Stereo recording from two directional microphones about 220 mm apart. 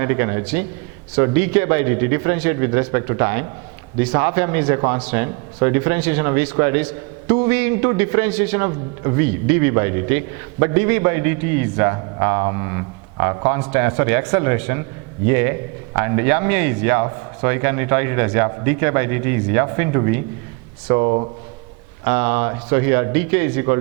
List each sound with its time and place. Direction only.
0.0 s a man's voice: 15° right (ahead or behind)
22.0 s a man's voice: 10° right (ahead or behind)